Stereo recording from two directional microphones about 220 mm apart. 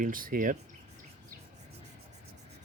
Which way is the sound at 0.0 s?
40° right (ahead or behind).